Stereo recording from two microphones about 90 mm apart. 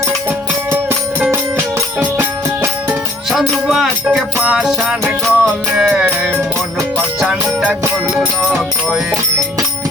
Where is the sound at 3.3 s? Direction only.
Centre (ahead or behind).